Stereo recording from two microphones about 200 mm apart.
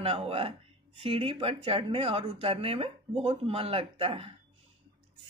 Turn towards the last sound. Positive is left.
turn(degrees=-30)  # may be behind; listen again after turning